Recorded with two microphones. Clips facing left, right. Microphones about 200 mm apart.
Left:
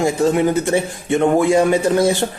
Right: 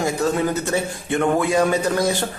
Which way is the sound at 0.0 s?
25° left (ahead or behind).